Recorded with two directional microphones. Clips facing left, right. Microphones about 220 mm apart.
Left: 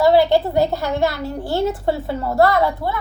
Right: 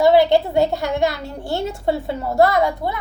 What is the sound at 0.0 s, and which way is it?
A woman's voice, 25° right (ahead or behind).